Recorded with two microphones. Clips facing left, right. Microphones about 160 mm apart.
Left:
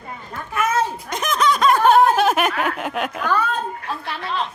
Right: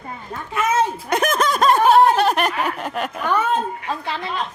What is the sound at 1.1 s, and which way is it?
Snicker, 50° right (ahead or behind).